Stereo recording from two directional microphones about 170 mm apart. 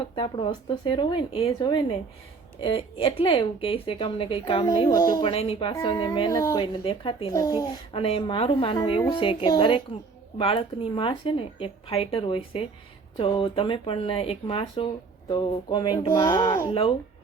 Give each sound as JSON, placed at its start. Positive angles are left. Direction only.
{"t": 0.0, "sound": "speech", "side_deg": 30}
{"t": 4.9, "sound": "speech", "side_deg": 20}
{"t": 5.3, "sound": "speech", "side_deg": 35}
{"t": 5.8, "sound": "speech", "side_deg": 25}
{"t": 6.8, "sound": "speech", "side_deg": 30}
{"t": 7.3, "sound": "speech", "side_deg": 20}
{"t": 7.9, "sound": "speech", "side_deg": 35}
{"t": 16.6, "sound": "speech", "side_deg": 30}